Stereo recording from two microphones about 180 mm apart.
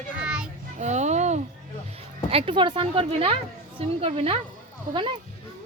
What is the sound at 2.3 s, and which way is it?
A woman's voice, 30° right (ahead or behind).